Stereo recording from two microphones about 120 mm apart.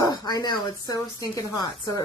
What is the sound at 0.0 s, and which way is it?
Speech, 35° left (ahead or behind).